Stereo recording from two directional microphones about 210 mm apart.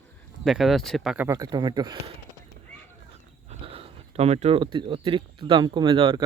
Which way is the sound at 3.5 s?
25° right (ahead or behind).